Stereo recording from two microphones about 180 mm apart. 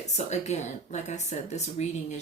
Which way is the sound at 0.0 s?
40° left (ahead or behind).